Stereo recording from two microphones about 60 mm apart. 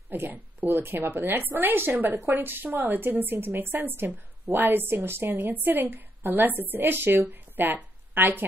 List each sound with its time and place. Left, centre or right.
0.1 s a woman's voice: right